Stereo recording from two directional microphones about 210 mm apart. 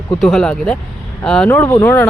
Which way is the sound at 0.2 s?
Centre (ahead or behind).